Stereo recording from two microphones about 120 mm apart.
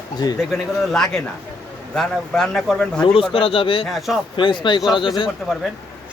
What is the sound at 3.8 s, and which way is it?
Speech, centre (ahead or behind).